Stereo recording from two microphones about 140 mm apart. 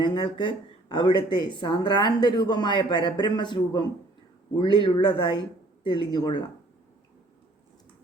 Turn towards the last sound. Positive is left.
turn(degrees=30)  # may be behind; listen again after turning